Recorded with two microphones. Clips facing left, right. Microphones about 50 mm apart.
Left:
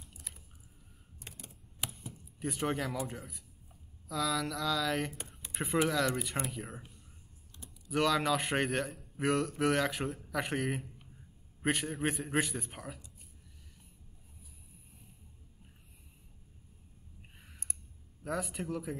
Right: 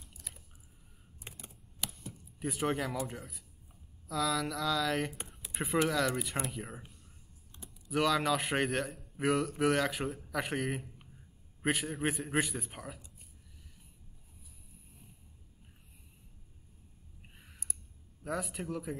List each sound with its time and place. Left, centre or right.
1.2 s typing: centre
1.9 s a man's voice: centre
5.3 s a sound: centre
5.9 s a man's voice: centre
18.2 s a man's voice: centre